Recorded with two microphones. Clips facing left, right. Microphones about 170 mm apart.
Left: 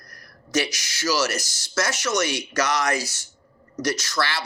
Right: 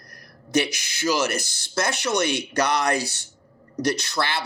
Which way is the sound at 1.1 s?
55° right (ahead or behind).